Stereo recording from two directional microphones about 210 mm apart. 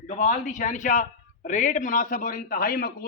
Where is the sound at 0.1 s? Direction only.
35° left (ahead or behind).